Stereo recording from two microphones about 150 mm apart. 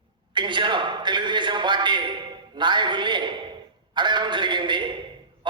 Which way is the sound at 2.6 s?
30° right (ahead or behind).